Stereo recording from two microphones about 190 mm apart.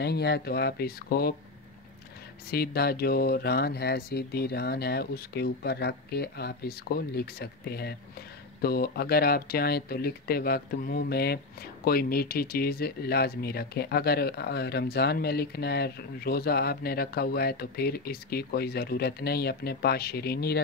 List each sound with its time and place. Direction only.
0.0 s speech: 60° left (ahead or behind)
2.5 s speech: 55° left (ahead or behind)